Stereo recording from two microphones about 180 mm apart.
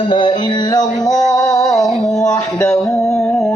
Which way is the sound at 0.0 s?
30° left (ahead or behind).